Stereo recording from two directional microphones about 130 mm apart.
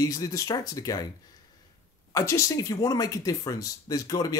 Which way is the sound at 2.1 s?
25° left (ahead or behind).